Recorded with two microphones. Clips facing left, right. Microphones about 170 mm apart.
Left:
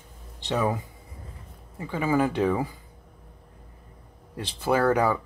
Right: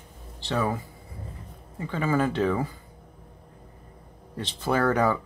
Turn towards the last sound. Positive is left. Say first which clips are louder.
# left 1 dB
turn(degrees=10)  # may be behind; listen again after turning